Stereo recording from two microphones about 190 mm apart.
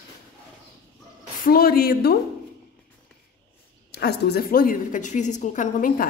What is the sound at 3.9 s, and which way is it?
A woman's voice, 60° left (ahead or behind).